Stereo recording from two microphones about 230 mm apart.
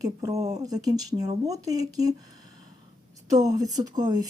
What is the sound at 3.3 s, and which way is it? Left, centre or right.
Speech, centre.